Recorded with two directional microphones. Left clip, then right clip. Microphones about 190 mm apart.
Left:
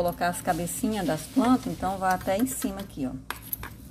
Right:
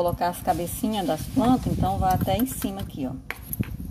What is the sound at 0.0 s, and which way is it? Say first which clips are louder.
A woman's voice: right 2 dB; centre (ahead or behind).